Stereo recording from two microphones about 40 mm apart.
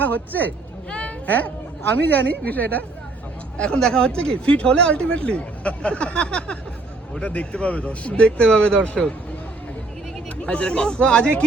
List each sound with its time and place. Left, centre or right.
0.0 s speech: left
0.9 s a sound: left
1.3 s speech: left
3.8 s speech: centre
10.4 s speech: left